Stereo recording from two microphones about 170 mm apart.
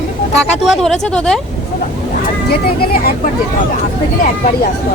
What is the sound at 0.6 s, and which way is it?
Speech, centre (ahead or behind).